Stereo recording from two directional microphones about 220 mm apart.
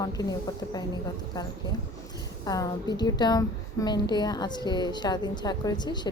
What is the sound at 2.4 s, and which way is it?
A woman's voice, 15° left (ahead or behind).